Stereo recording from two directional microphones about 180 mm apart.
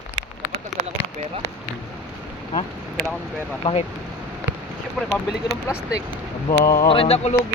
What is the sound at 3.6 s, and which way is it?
Speech, 35° left (ahead or behind).